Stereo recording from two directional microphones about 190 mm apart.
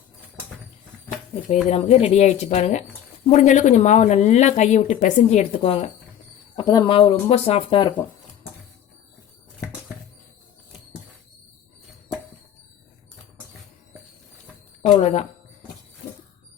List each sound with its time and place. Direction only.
1.6 s a woman's voice: 35° left (ahead or behind)
6.6 s speech: 20° left (ahead or behind)
14.8 s a woman's voice: 35° left (ahead or behind)